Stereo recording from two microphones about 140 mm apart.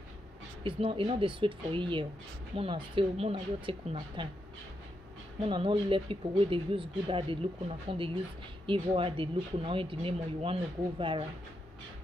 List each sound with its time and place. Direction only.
0.7 s speech: 40° right (ahead or behind)
5.4 s speech: 40° right (ahead or behind)